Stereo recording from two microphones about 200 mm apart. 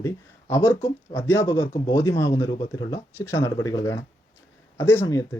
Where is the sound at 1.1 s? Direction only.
10° left (ahead or behind).